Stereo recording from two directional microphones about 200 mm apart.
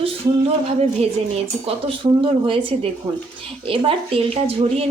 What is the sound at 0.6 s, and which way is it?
Speech, 35° right (ahead or behind).